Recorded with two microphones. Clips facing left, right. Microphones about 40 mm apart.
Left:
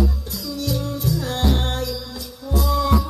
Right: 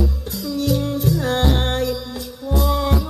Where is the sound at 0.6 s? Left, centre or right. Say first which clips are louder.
Right 5 dB; right.